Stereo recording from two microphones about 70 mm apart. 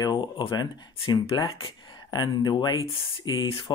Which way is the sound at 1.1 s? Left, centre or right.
Left.